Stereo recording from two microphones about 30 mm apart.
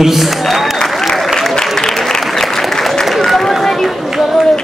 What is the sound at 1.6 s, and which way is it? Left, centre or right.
Applause, centre.